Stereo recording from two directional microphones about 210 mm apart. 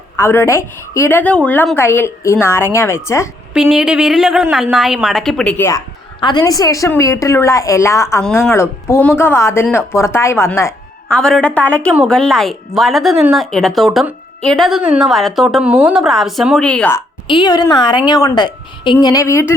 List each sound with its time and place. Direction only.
0.2 s a woman's voice: 10° left (ahead or behind)
3.5 s a woman's voice: centre (ahead or behind)
17.2 s a woman's voice: 20° left (ahead or behind)